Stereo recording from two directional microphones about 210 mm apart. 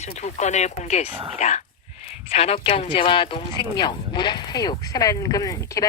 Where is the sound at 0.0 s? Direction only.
35° left (ahead or behind).